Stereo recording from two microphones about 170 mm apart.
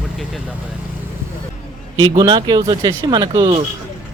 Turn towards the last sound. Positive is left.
turn(degrees=-25)  # may be behind; listen again after turning